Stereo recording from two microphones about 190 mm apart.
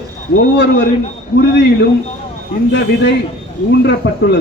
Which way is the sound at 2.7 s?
65° left (ahead or behind).